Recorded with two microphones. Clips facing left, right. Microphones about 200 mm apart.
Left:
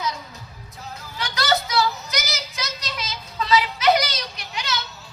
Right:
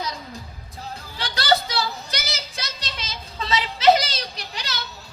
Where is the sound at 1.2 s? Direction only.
30° right (ahead or behind).